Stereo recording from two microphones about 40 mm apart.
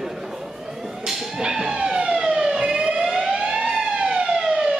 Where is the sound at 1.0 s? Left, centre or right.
Centre.